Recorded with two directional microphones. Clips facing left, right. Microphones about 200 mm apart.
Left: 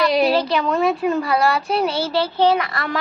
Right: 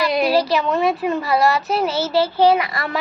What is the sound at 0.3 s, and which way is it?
A child's voice, 5° right (ahead or behind).